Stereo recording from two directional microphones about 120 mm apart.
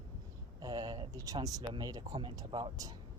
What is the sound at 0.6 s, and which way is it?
Speech, 35° right (ahead or behind).